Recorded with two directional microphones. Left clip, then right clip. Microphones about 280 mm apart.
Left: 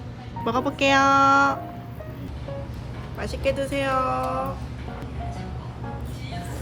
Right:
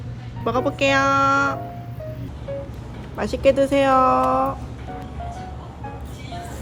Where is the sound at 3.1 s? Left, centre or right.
Right.